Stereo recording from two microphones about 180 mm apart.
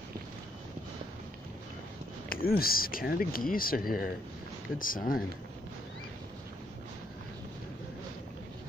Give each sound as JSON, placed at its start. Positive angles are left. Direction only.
{"t": 2.2, "sound": "speech", "side_deg": 55}